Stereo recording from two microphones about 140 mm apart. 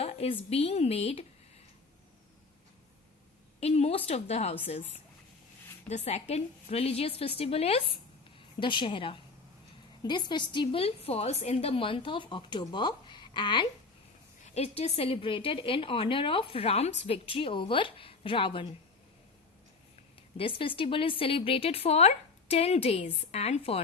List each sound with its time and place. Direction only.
0.0 s speech: 45° left (ahead or behind)
3.6 s speech: 45° left (ahead or behind)
5.9 s a woman's voice: 55° left (ahead or behind); by 13.7 s 35° left (ahead or behind)
14.4 s a woman's voice: 50° left (ahead or behind)
20.3 s speech: 40° left (ahead or behind)